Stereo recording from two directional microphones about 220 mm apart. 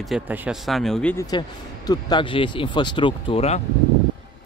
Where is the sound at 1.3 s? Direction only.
15° left (ahead or behind).